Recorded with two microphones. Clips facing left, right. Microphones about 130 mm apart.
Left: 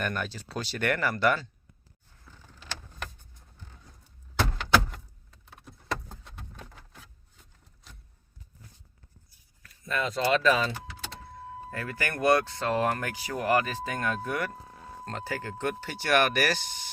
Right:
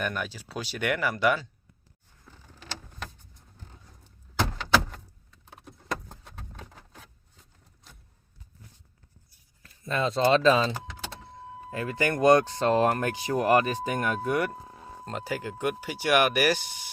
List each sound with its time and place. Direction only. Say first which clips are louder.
0.0 s speech: even; 5° right (ahead or behind)
9.6 s speech: right 3 dB; 30° right (ahead or behind); by 16.9 s 10° right (ahead or behind)